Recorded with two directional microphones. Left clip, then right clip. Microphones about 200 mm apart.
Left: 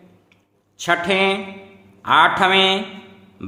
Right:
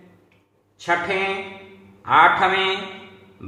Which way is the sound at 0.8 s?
60° left (ahead or behind).